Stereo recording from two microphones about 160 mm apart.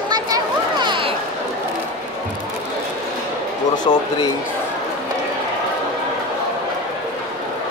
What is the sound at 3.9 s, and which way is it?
Speech, 35° left (ahead or behind).